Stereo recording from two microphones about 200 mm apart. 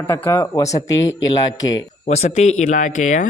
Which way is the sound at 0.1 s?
15° left (ahead or behind).